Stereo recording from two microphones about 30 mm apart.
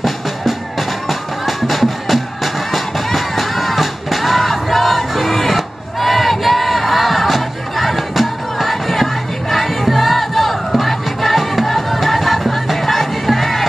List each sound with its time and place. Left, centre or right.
0.0 s music: centre